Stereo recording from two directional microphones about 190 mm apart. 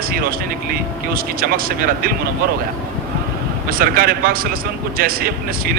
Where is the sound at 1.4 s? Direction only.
50° right (ahead or behind).